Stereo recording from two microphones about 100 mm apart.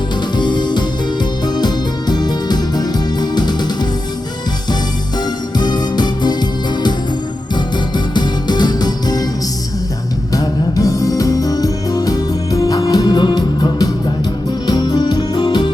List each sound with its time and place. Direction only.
0.3 s music: 50° left (ahead or behind)
5.2 s music: 45° left (ahead or behind)
10.3 s music: 35° left (ahead or behind)